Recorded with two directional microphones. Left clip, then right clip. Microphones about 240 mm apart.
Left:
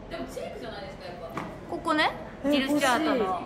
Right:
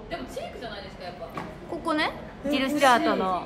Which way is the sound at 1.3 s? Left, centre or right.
Centre.